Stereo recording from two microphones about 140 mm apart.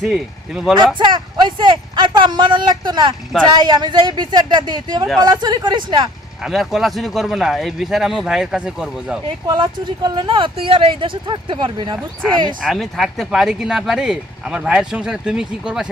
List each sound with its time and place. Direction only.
0.0 s speech: centre (ahead or behind)
0.9 s speech: 30° right (ahead or behind)
6.4 s speech: centre (ahead or behind)
9.5 s speech: 30° right (ahead or behind)
12.6 s speech: centre (ahead or behind)